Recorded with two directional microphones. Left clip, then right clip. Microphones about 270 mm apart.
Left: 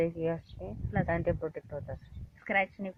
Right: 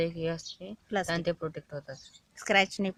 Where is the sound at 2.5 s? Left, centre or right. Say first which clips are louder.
Right 5 dB; right.